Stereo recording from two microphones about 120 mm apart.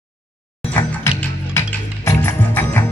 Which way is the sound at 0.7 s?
20° left (ahead or behind).